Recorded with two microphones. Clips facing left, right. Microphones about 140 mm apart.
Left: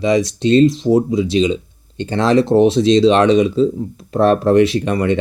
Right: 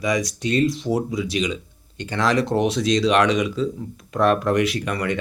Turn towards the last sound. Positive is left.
turn(degrees=25)  # may be behind; listen again after turning